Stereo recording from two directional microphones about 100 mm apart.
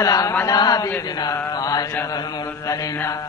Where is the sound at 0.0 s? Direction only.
35° left (ahead or behind).